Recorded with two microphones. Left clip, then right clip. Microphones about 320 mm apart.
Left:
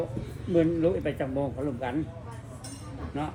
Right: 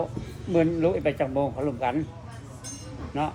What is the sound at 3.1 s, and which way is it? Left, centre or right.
Speech, right.